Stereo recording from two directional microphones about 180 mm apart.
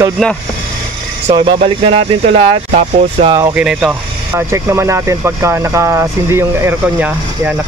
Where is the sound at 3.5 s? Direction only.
5° right (ahead or behind).